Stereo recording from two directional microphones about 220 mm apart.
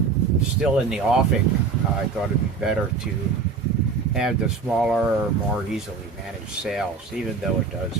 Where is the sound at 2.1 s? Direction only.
5° right (ahead or behind).